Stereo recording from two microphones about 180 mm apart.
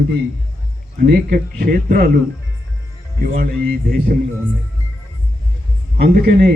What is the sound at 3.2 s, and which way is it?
Speech, 50° right (ahead or behind).